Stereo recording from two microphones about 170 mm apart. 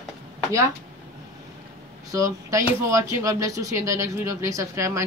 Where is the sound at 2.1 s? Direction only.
20° right (ahead or behind).